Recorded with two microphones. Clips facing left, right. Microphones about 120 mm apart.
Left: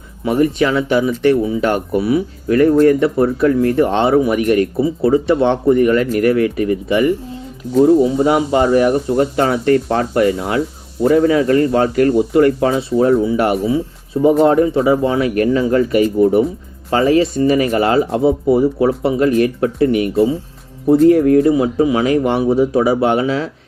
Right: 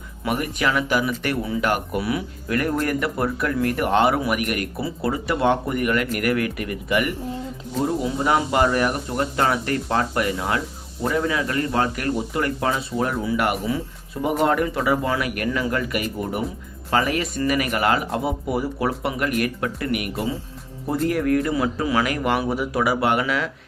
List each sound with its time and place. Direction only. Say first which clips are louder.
0.3 s speech: left 9 dB; 30° left (ahead or behind)